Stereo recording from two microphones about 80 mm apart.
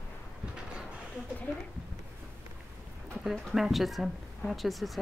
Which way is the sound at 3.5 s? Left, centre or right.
Centre.